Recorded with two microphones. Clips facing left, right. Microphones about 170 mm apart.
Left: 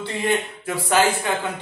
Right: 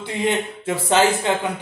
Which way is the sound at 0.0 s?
20° right (ahead or behind).